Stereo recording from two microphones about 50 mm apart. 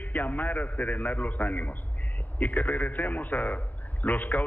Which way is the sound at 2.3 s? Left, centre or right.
Left.